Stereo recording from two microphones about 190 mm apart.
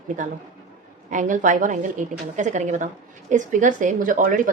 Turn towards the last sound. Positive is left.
turn(degrees=-45)  # may be behind; listen again after turning